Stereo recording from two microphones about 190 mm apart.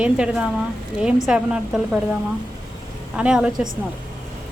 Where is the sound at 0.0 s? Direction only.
5° right (ahead or behind).